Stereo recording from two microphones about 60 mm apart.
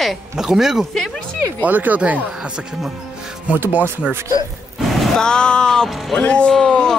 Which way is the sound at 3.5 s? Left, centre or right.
Right.